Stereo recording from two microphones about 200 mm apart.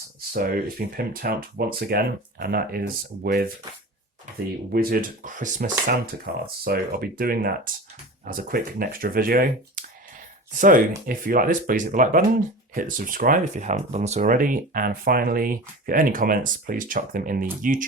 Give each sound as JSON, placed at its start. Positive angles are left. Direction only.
{"t": 0.3, "sound": "speech", "side_deg": -45}
{"t": 4.7, "sound": "speech", "side_deg": -45}